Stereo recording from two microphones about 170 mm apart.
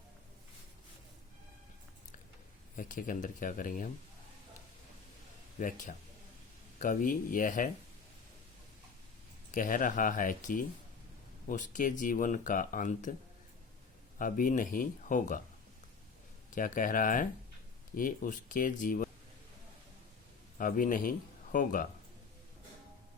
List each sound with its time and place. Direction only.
2.7 s speech: 50° left (ahead or behind)
5.5 s speech: 50° left (ahead or behind)
9.6 s speech: 50° left (ahead or behind)
14.2 s speech: 55° left (ahead or behind)
16.6 s speech: 50° left (ahead or behind)
20.6 s speech: 50° left (ahead or behind)